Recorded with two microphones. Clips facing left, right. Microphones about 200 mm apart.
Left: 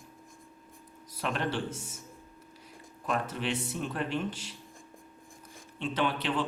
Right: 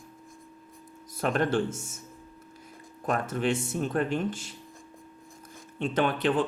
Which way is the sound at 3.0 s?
45° right (ahead or behind).